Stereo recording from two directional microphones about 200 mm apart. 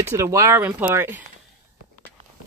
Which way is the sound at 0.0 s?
15° right (ahead or behind).